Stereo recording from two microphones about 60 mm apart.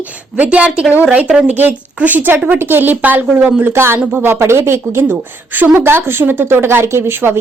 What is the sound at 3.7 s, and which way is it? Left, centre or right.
Speech, right.